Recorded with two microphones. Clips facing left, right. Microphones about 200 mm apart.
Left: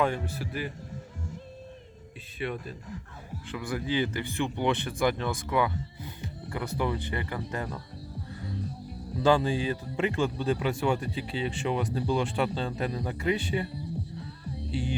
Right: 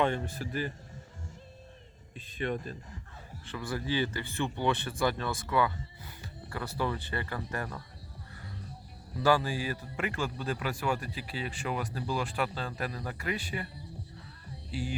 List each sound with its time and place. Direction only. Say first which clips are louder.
0.0 s speech: left 1 dB; 10° left (ahead or behind)
2.4 s speech: even; 5° left (ahead or behind)
9.2 s speech: left 4 dB; 20° left (ahead or behind)
14.7 s music: left 4 dB; 25° left (ahead or behind)